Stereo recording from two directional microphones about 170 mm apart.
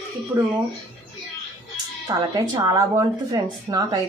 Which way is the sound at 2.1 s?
25° right (ahead or behind).